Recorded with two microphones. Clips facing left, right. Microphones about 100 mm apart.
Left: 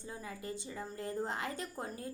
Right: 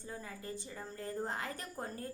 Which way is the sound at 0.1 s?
20° left (ahead or behind).